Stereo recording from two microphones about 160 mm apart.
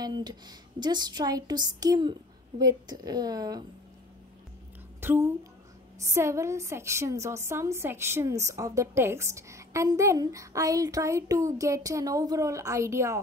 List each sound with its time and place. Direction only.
0.0 s a woman's voice: 25° right (ahead or behind)
5.0 s a woman's voice: 15° right (ahead or behind)